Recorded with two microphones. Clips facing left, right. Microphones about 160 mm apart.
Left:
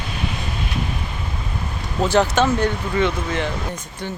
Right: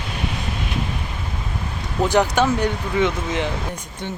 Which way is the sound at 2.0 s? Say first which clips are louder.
Even; 15° right (ahead or behind).